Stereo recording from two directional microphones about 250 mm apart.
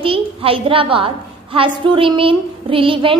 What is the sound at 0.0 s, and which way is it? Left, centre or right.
A woman's voice, right.